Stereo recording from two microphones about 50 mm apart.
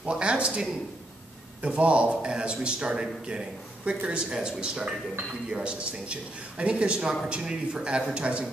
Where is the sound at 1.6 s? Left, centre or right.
Right.